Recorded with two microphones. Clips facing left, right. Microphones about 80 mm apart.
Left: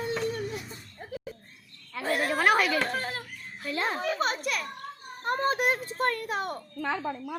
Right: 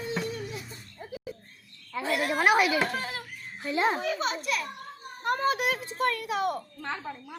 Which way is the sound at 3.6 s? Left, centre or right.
Centre.